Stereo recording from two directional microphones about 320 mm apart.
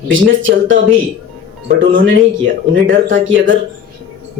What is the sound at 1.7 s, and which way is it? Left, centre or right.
Speech, right.